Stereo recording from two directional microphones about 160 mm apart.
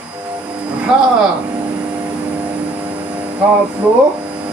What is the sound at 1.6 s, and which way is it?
Vehicle, 10° right (ahead or behind).